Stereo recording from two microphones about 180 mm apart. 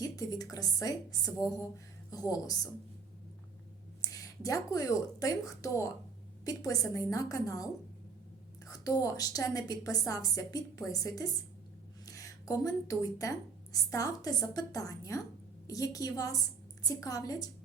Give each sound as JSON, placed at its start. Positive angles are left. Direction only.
{"t": 0.0, "sound": "a woman's voice", "side_deg": 20}
{"t": 4.0, "sound": "a woman's voice", "side_deg": 20}
{"t": 8.7, "sound": "a woman's voice", "side_deg": 20}